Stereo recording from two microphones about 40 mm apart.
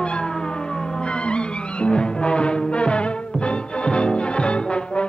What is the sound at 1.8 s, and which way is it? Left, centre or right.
Music, left.